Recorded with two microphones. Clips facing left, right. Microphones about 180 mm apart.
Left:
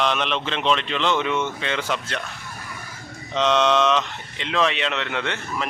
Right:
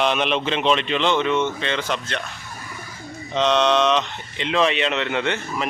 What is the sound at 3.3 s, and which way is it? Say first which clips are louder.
Speech: right 1 dB; 5° left (ahead or behind).